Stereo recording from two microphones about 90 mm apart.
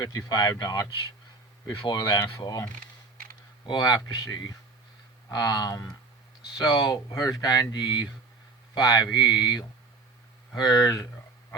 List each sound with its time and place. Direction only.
0.3 s speech: 45° left (ahead or behind)
1.7 s speech: 65° left (ahead or behind)
2.0 s speech: 45° left (ahead or behind)
3.7 s speech: 50° left (ahead or behind)